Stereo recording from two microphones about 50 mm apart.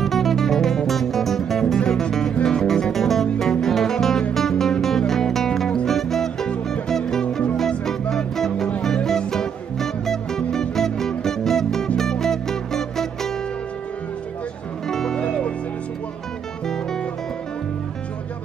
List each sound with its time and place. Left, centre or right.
0.0 s music: centre
14.9 s music: centre
15.2 s music: left
16.6 s music: centre